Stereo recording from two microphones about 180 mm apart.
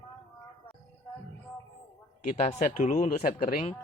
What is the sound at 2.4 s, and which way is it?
Speech, 40° left (ahead or behind).